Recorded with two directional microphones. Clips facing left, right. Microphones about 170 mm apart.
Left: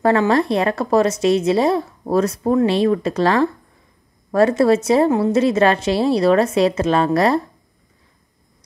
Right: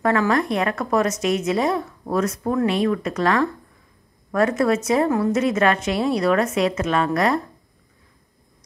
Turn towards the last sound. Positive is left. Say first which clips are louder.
# left 4 dB
turn(degrees=30)  # may be behind; listen again after turning